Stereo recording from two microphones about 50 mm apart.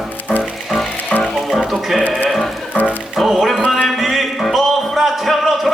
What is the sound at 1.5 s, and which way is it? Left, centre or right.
Sheep, centre.